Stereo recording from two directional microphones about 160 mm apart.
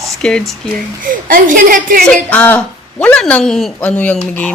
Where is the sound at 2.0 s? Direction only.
5° left (ahead or behind).